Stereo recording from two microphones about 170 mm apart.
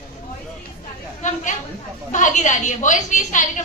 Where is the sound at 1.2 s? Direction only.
45° left (ahead or behind).